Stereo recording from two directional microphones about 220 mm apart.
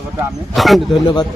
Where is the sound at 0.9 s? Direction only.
20° left (ahead or behind).